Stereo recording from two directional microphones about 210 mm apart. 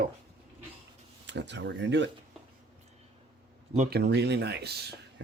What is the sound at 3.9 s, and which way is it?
Speech, 50° right (ahead or behind).